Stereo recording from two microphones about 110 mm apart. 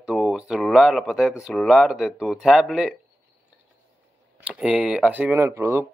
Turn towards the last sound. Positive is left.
turn(degrees=-25)  # may be behind; listen again after turning